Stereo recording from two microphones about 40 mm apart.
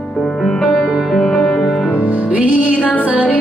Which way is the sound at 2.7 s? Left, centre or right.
Left.